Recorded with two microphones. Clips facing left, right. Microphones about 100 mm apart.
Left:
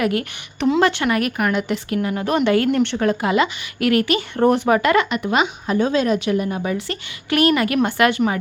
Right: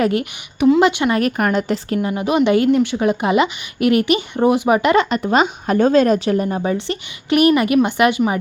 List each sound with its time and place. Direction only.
0.0 s speech: 25° right (ahead or behind)
1.4 s a woman's voice: 35° right (ahead or behind)
2.0 s speech: 15° right (ahead or behind)
5.0 s a woman's voice: 35° right (ahead or behind)
5.6 s speech: 50° right (ahead or behind)
6.6 s speech: 25° right (ahead or behind)